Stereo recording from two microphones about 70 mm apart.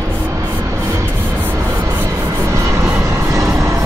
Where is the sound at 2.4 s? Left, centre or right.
Right.